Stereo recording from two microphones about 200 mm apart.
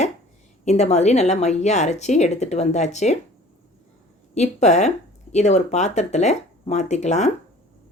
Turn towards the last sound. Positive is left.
turn(degrees=35)  # may be behind; listen again after turning